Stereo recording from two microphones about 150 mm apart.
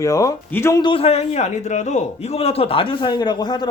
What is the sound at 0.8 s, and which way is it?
A man's voice, 35° left (ahead or behind).